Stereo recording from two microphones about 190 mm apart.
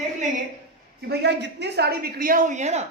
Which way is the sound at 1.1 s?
65° right (ahead or behind).